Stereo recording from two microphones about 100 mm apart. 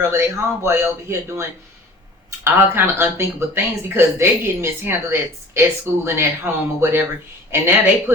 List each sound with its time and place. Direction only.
0.0 s speech: 25° right (ahead or behind)
2.4 s speech: 25° right (ahead or behind)